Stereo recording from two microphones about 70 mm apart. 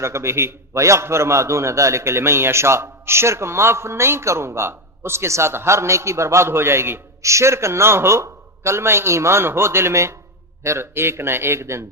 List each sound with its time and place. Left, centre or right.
0.0 s a man's voice: right